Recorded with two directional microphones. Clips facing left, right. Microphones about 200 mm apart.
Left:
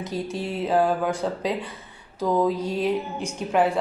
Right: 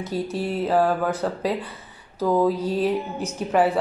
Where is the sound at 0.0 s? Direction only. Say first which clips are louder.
Right 2 dB; centre (ahead or behind).